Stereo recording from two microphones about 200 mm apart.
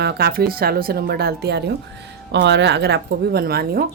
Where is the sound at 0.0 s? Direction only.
55° right (ahead or behind).